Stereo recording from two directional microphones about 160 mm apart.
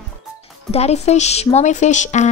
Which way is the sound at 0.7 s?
40° left (ahead or behind).